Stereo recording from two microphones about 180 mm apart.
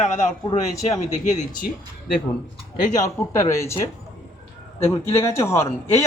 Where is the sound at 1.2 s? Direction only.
40° left (ahead or behind).